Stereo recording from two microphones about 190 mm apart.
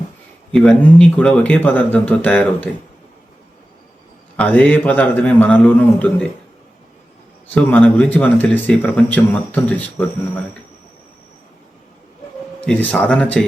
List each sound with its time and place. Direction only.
0.5 s speech: 5° left (ahead or behind)
4.4 s speech: 10° left (ahead or behind)
7.5 s speech: 10° left (ahead or behind)
12.9 s speech: 5° left (ahead or behind)